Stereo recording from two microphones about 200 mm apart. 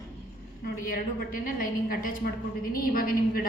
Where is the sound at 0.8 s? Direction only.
45° left (ahead or behind).